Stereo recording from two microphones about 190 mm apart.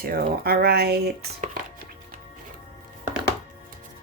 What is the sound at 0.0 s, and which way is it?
Speech, 50° right (ahead or behind).